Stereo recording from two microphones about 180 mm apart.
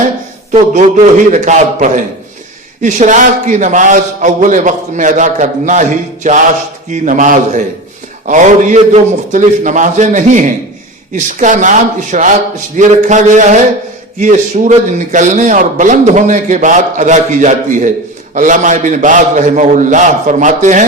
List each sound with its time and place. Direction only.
0.5 s a man's voice: 40° right (ahead or behind)